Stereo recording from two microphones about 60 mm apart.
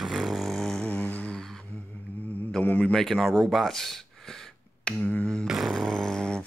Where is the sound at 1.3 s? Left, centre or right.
Centre.